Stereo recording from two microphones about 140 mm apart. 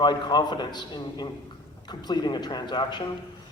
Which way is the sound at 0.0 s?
30° left (ahead or behind).